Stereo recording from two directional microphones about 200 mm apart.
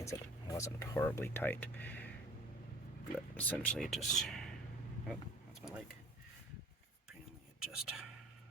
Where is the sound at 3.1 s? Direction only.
10° left (ahead or behind).